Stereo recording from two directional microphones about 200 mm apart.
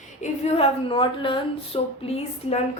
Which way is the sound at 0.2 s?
35° left (ahead or behind).